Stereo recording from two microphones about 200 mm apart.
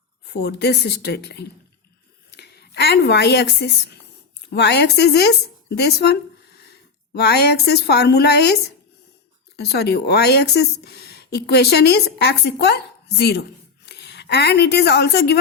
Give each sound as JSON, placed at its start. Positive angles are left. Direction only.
{"t": 0.3, "sound": "a woman's voice", "side_deg": 55}